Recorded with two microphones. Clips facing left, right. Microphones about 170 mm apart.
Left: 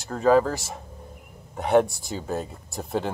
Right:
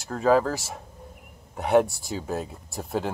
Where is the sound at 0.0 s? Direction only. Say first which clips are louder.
Left 2 dB; centre (ahead or behind).